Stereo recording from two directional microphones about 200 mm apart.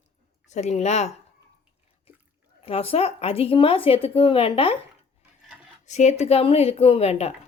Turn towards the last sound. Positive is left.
turn(degrees=30)  # may be behind; listen again after turning